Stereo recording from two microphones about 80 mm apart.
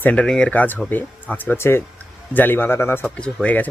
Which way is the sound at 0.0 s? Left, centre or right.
Centre.